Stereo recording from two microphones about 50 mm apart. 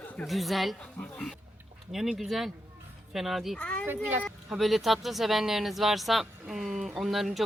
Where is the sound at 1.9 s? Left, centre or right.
Centre.